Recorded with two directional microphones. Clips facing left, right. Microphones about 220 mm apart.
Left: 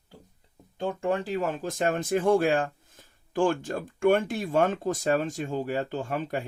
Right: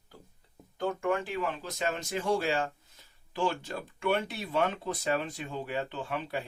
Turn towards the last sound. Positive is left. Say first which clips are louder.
# left 4 dB
turn(degrees=45)  # may be behind; listen again after turning